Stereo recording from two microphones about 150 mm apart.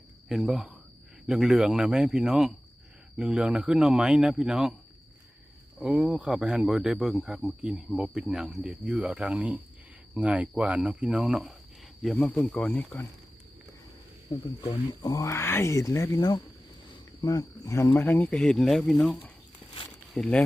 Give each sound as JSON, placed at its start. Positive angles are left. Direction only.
{"t": 0.3, "sound": "speech", "side_deg": -5}
{"t": 5.8, "sound": "speech", "side_deg": -5}
{"t": 12.0, "sound": "speech", "side_deg": 5}
{"t": 14.7, "sound": "speech", "side_deg": 25}